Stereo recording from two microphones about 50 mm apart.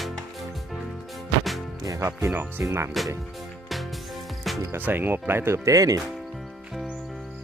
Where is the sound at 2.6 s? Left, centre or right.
Right.